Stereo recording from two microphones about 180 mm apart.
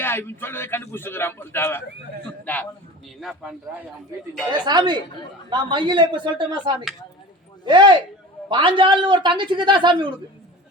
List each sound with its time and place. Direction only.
0.0 s a man's voice: 10° left (ahead or behind)
3.2 s a man's voice: centre (ahead or behind)
4.4 s a woman's voice: 25° right (ahead or behind)